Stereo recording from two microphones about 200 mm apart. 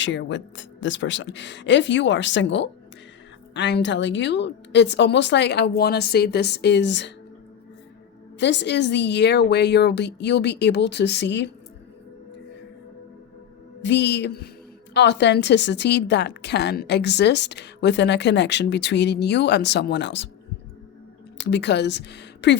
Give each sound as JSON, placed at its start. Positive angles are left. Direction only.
{"t": 0.0, "sound": "a woman's voice", "side_deg": 65}
{"t": 8.4, "sound": "a woman's voice", "side_deg": 60}
{"t": 13.8, "sound": "a woman's voice", "side_deg": 60}
{"t": 21.3, "sound": "a woman's voice", "side_deg": 60}